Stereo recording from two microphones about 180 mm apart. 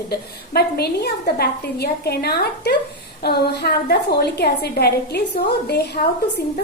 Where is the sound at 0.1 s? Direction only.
60° left (ahead or behind).